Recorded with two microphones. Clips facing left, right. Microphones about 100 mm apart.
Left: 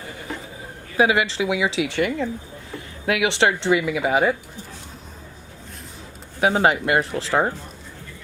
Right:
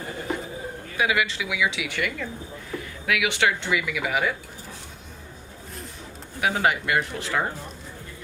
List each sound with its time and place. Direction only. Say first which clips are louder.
0.9 s speech: left 6 dB; 30° left (ahead or behind)
6.4 s speech: left 5 dB; 30° left (ahead or behind)